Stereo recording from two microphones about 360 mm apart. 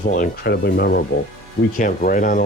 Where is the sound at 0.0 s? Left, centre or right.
Left.